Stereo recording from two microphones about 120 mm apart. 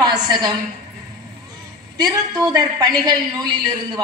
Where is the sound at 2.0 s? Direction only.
35° right (ahead or behind).